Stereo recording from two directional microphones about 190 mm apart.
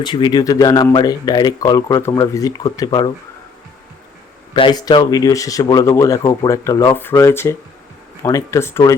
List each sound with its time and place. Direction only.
0.0 s speech: 25° left (ahead or behind)
4.5 s speech: 25° left (ahead or behind)